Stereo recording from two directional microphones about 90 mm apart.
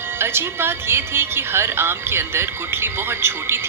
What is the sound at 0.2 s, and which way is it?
Speech, 25° right (ahead or behind).